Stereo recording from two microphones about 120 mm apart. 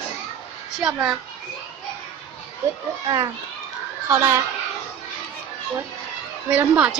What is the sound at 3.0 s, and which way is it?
A child's voice, 35° right (ahead or behind).